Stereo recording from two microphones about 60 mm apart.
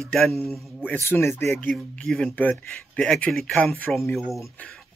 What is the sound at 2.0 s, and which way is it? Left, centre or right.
Speech, centre.